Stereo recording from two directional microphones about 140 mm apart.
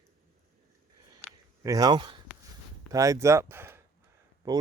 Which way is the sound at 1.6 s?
25° right (ahead or behind).